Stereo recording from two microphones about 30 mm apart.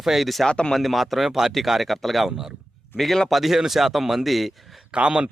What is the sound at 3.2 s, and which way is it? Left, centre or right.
A man's voice, centre.